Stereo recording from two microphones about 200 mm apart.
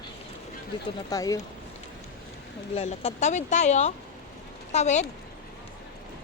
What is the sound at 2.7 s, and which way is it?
Speech, 30° left (ahead or behind).